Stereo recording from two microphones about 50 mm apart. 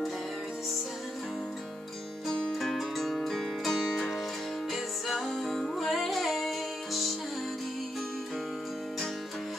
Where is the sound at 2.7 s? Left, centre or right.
Centre.